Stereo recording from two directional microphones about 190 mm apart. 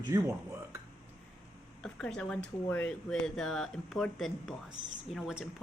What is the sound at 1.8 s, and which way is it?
Speech, 5° left (ahead or behind).